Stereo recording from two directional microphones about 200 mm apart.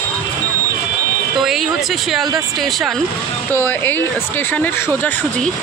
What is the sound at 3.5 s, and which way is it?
Speech, 10° left (ahead or behind).